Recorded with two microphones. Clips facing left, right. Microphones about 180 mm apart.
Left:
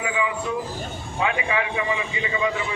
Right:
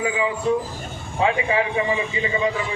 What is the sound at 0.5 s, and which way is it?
A man's voice, 35° right (ahead or behind).